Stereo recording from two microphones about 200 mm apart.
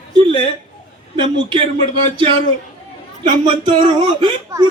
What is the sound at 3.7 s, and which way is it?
Speech, 25° right (ahead or behind).